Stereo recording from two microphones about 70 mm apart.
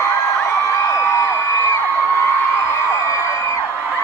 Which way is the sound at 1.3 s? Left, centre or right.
Left.